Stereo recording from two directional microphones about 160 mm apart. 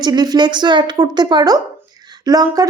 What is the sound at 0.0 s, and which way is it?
Speech, 25° right (ahead or behind).